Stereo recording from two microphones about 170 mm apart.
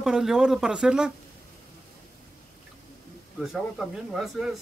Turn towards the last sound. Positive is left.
turn(degrees=0)  # may be behind; listen again after turning